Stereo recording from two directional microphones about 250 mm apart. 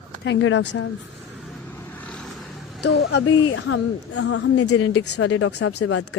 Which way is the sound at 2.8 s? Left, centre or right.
Left.